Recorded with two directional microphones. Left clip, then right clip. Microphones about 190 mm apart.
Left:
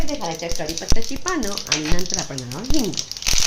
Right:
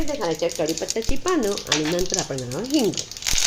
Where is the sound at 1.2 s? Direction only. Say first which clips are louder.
Right 3 dB; 15° right (ahead or behind).